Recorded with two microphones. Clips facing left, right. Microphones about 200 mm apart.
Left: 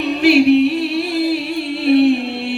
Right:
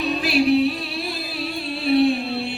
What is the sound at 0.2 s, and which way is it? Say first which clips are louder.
Music: left 11 dB; 70° left (ahead or behind).